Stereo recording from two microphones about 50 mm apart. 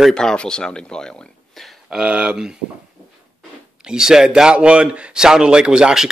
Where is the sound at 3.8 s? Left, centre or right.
Centre.